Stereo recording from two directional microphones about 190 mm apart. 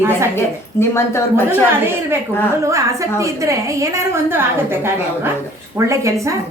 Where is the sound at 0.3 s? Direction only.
15° left (ahead or behind).